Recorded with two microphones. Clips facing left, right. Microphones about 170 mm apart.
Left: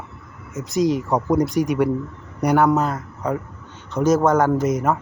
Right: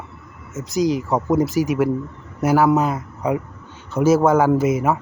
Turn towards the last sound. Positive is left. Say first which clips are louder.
# right 2 dB
turn(degrees=-5)  # may be behind; listen again after turning